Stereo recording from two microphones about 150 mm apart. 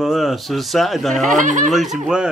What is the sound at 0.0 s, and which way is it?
Speech, centre (ahead or behind).